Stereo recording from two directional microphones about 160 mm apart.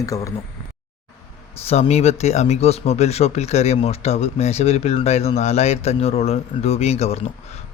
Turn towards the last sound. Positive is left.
turn(degrees=40)  # may be behind; listen again after turning